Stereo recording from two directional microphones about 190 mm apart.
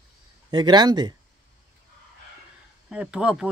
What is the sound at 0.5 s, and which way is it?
Speech, 20° right (ahead or behind).